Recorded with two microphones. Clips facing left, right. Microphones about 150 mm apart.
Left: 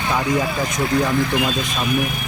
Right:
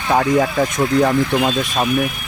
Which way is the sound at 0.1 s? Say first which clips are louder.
Right 6 dB; 50° right (ahead or behind).